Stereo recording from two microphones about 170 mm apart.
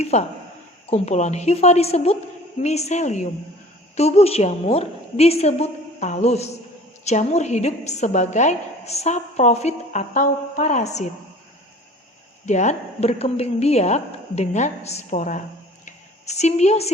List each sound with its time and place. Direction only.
0.0 s a woman's voice: 40° left (ahead or behind)
12.5 s a woman's voice: 45° left (ahead or behind)